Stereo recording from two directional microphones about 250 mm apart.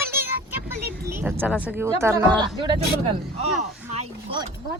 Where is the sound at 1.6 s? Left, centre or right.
Centre.